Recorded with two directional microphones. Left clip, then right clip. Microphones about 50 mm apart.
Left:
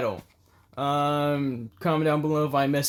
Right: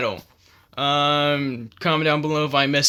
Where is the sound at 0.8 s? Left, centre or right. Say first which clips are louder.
Right 5 dB; centre.